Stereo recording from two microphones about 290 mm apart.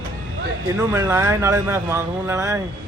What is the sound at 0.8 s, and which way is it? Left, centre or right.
Speech, centre.